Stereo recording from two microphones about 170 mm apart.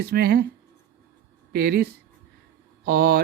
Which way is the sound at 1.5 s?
65° right (ahead or behind).